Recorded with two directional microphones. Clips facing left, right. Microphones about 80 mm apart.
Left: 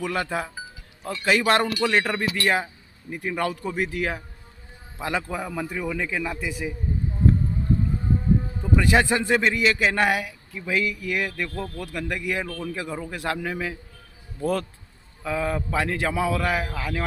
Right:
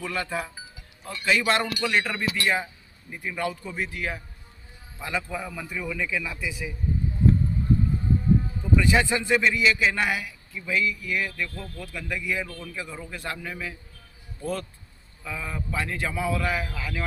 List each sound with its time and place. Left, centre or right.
0.0 s speech: left
1.2 s a man's voice: left
3.9 s speech: left
4.9 s a man's voice: left
8.7 s a man's voice: left
15.2 s a man's voice: left